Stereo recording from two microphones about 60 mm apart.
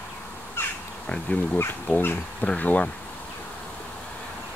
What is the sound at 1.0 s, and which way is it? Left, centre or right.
Speech, centre.